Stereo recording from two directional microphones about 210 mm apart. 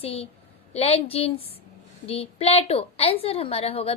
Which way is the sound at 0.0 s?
30° left (ahead or behind).